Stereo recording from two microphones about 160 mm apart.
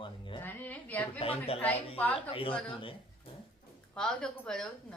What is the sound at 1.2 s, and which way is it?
Speech, 35° left (ahead or behind).